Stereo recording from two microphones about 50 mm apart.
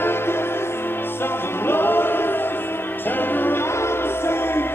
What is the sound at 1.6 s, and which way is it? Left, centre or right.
Choir, left.